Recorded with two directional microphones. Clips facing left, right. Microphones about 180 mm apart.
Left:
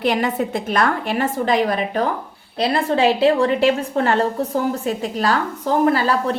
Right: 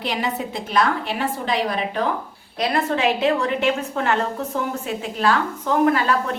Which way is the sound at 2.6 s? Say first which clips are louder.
Left 4 dB; 30° left (ahead or behind).